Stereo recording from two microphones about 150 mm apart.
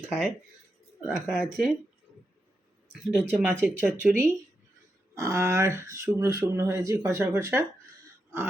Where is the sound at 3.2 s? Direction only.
10° right (ahead or behind).